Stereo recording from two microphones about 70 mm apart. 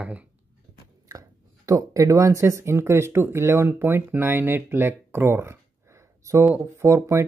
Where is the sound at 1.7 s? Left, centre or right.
Right.